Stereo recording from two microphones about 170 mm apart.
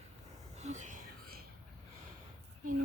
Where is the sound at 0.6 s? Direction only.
45° right (ahead or behind).